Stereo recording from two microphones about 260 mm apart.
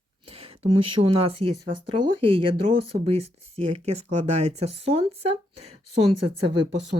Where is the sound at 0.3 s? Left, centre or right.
Right.